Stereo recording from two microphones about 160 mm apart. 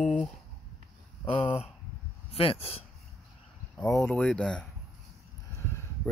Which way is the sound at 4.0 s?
5° left (ahead or behind).